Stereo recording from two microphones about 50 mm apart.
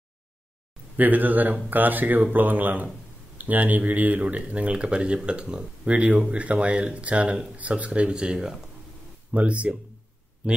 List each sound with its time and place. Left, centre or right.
0.9 s speech: right; by 8.5 s centre
9.3 s speech: right